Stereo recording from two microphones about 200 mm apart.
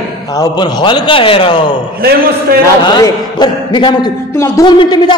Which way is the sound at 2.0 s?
50° right (ahead or behind).